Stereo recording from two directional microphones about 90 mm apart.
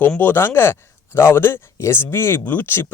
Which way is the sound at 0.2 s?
25° left (ahead or behind).